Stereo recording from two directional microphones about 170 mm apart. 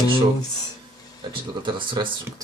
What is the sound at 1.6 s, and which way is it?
Speech, 30° right (ahead or behind).